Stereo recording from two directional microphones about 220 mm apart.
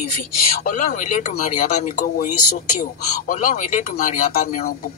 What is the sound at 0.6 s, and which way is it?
Speech, 35° left (ahead or behind).